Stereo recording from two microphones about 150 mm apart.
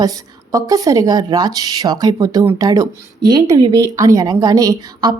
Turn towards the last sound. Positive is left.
turn(degrees=-25)  # may be behind; listen again after turning